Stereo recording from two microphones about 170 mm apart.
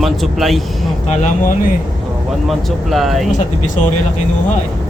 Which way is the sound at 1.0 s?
50° left (ahead or behind).